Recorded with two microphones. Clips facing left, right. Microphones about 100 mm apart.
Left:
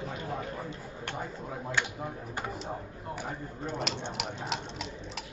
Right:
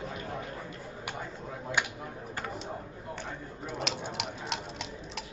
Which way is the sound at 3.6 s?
5° right (ahead or behind).